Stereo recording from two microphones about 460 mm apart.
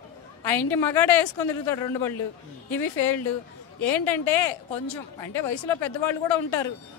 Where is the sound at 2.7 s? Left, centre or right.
Left.